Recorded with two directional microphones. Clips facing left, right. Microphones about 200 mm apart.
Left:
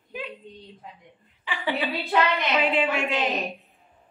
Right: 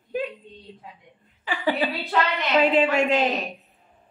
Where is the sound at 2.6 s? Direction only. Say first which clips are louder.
Right 8 dB; 40° right (ahead or behind).